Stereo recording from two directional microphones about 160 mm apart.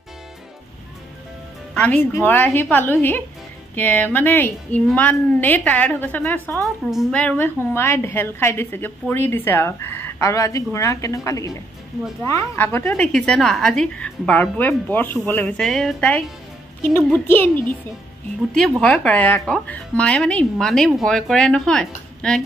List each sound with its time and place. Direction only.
1.7 s a woman's voice: 10° left (ahead or behind)
6.9 s speech: centre (ahead or behind)
7.2 s a woman's voice: 10° left (ahead or behind)